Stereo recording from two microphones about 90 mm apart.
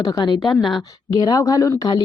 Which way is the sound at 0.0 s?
50° left (ahead or behind).